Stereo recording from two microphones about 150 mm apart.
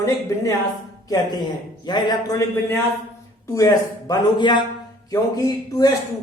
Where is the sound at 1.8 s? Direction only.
30° left (ahead or behind).